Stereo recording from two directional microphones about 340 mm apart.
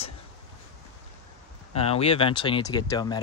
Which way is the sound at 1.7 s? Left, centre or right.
Centre.